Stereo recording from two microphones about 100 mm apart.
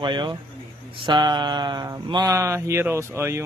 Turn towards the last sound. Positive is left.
turn(degrees=-25)  # may be behind; listen again after turning